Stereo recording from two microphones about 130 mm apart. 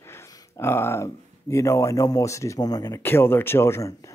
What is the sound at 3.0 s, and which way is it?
Speech, 15° left (ahead or behind).